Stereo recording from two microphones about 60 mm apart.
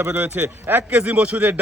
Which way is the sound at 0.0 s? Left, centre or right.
Right.